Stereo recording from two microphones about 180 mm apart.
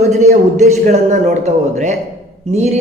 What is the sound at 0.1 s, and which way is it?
Speech, 40° right (ahead or behind).